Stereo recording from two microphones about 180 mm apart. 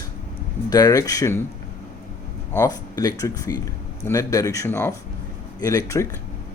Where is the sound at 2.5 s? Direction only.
15° left (ahead or behind).